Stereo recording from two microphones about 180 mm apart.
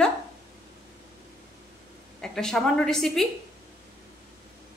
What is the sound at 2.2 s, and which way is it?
A woman's voice, 5° left (ahead or behind).